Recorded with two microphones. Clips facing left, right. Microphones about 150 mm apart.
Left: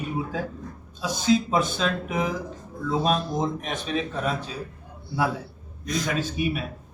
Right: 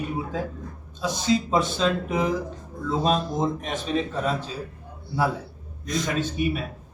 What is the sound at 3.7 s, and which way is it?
Speech, 35° right (ahead or behind).